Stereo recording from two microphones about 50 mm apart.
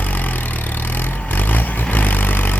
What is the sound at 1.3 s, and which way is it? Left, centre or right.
Vehicle, left.